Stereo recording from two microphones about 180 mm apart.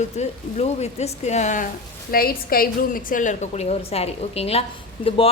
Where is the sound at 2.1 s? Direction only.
55° left (ahead or behind).